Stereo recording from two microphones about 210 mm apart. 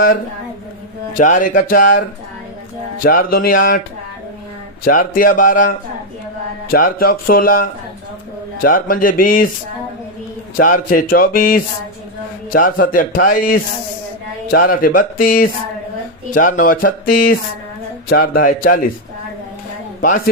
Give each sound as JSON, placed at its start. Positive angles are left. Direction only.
{"t": 1.1, "sound": "a man's voice", "side_deg": 40}
{"t": 4.9, "sound": "a man's voice", "side_deg": 40}
{"t": 10.6, "sound": "a man's voice", "side_deg": 40}
{"t": 20.0, "sound": "a man's voice", "side_deg": 40}